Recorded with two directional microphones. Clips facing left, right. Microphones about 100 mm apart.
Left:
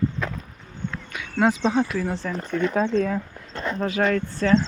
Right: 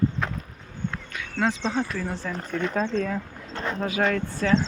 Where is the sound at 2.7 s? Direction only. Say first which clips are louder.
Left 3 dB; 10° left (ahead or behind).